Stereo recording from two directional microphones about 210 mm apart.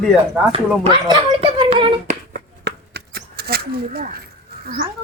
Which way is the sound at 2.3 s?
50° right (ahead or behind).